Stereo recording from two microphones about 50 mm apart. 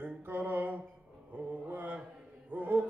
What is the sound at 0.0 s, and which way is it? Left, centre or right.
Mantra, right.